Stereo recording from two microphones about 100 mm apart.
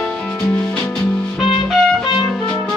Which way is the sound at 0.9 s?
5° right (ahead or behind).